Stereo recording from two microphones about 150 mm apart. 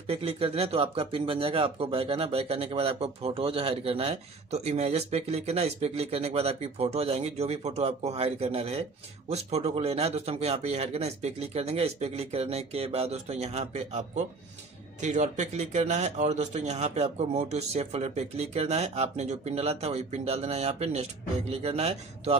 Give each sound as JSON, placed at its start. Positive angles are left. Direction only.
{"t": 0.0, "sound": "speech", "side_deg": -40}